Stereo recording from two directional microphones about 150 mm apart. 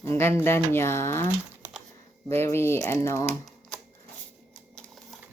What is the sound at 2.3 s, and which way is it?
Speech, 15° left (ahead or behind).